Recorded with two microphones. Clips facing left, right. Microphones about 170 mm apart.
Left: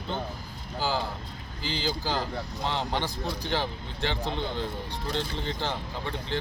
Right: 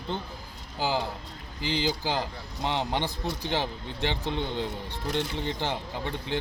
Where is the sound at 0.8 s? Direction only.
15° right (ahead or behind).